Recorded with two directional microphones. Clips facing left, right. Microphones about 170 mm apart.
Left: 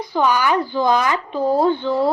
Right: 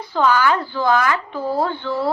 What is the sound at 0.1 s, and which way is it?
Speech, 15° left (ahead or behind).